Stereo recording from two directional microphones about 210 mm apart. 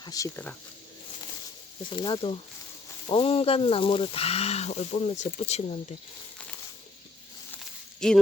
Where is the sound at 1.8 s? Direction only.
20° left (ahead or behind).